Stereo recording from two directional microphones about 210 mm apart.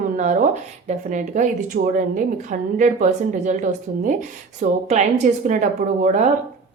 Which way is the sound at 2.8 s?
35° right (ahead or behind).